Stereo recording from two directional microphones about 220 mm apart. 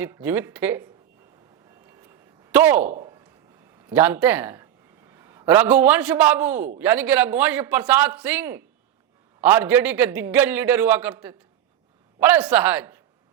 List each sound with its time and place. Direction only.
0.0 s a man's voice: 10° right (ahead or behind)
1.9 s a sound: 10° right (ahead or behind)
3.8 s a man's voice: 10° right (ahead or behind)